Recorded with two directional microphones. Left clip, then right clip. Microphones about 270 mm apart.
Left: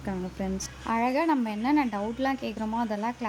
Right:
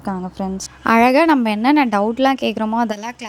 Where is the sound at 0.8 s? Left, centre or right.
Right.